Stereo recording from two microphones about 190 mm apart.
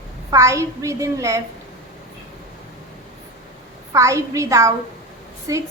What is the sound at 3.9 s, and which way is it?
A woman's voice, 15° right (ahead or behind).